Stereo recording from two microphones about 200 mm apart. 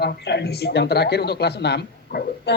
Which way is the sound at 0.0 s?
55° left (ahead or behind).